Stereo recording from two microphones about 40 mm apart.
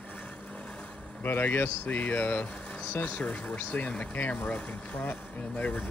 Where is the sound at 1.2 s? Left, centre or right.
Left.